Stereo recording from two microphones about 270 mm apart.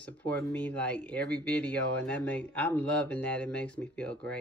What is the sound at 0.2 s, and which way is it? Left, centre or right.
Speech, centre.